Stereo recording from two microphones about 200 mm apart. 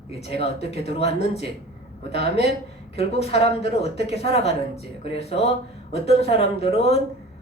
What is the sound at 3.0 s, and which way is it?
Speech, 30° left (ahead or behind).